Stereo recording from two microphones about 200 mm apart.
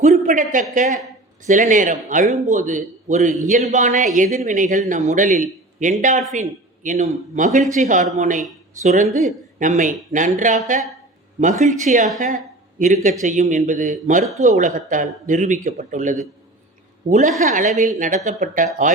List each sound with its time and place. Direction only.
0.0 s speech: 35° right (ahead or behind)
11.6 s speech: 35° right (ahead or behind)